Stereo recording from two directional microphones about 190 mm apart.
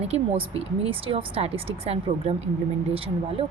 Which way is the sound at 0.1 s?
30° right (ahead or behind).